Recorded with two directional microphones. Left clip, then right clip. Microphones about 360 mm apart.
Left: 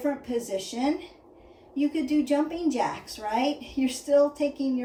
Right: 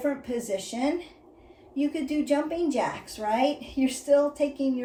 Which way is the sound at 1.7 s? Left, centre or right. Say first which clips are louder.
Left 2 dB; centre.